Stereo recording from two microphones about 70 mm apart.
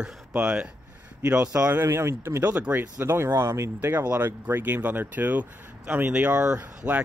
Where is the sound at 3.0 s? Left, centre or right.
Right.